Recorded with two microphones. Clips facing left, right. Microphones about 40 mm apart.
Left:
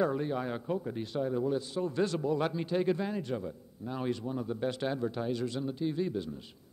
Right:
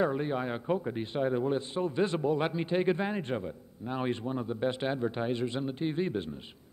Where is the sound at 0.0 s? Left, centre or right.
Right.